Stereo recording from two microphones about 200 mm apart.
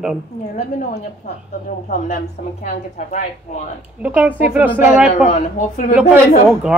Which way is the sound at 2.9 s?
40° left (ahead or behind).